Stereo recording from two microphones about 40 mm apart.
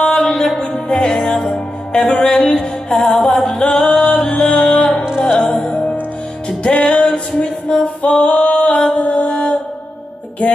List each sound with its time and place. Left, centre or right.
0.0 s music: centre
1.3 s music: centre
2.0 s music: centre
5.7 s music: left
7.1 s a sound: left
8.2 s music: centre
8.9 s music: left